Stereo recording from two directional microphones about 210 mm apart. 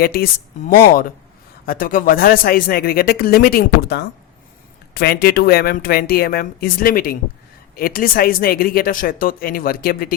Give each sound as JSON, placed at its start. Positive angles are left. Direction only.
{"t": 0.0, "sound": "speech", "side_deg": 45}